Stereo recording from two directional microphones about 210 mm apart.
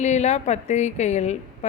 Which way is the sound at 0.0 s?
35° left (ahead or behind).